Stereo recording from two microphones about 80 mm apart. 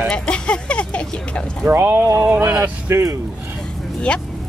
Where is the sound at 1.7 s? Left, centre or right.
Right.